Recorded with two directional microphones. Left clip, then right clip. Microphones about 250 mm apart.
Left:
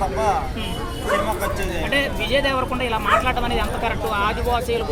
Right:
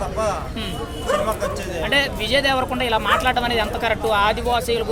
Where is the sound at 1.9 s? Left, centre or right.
Right.